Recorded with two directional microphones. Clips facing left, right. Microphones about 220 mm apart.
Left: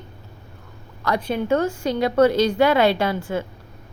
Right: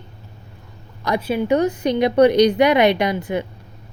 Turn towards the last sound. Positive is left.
turn(degrees=-20)  # may be behind; listen again after turning